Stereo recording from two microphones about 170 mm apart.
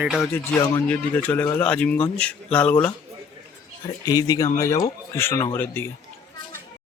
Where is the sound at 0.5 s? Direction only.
5° left (ahead or behind).